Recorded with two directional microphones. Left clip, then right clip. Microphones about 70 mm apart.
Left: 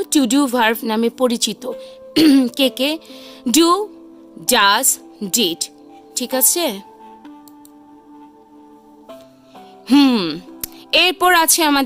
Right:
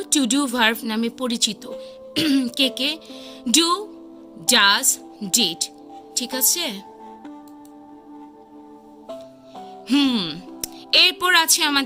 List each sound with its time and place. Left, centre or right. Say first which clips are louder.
0.0 s a woman's voice: left 5 dB; left
2.4 s speech: left 4 dB; left
9.0 s music: right 4 dB; centre
9.8 s speech: left 6 dB; left